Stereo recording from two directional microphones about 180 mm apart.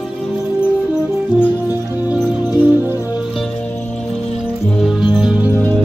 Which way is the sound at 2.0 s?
20° left (ahead or behind).